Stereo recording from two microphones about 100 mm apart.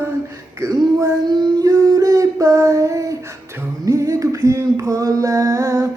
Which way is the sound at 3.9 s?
30° right (ahead or behind).